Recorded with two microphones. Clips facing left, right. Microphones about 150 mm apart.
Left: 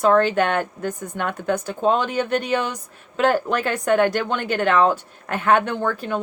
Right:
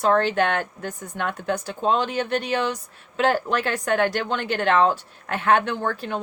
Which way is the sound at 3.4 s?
50° left (ahead or behind).